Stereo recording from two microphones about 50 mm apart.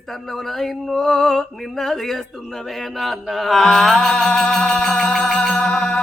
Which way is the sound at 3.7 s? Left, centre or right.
Centre.